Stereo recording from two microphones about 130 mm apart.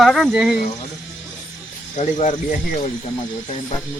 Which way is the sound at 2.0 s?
65° left (ahead or behind).